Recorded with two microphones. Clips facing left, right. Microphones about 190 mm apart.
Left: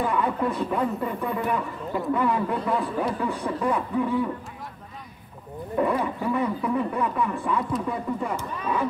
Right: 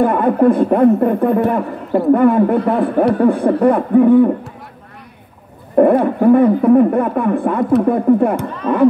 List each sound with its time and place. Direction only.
0.0 s speech: 55° right (ahead or behind)
5.8 s speech: 55° right (ahead or behind)